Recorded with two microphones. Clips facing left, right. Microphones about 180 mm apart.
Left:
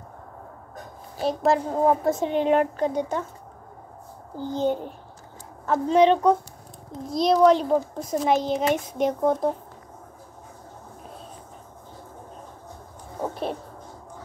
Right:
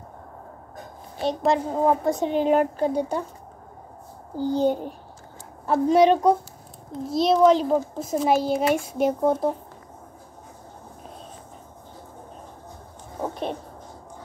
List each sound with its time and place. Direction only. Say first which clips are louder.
1.2 s a woman's voice: even; centre (ahead or behind)
4.4 s a woman's voice: right 3 dB; 10° right (ahead or behind)
13.2 s a sound: even; 5° left (ahead or behind)